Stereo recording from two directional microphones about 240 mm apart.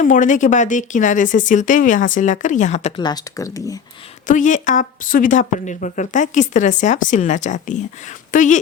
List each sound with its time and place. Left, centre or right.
0.0 s a woman's voice: left
3.0 s speech: centre
4.3 s a woman's voice: left